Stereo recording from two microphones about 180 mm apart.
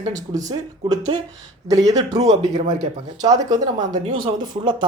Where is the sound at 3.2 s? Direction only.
20° right (ahead or behind).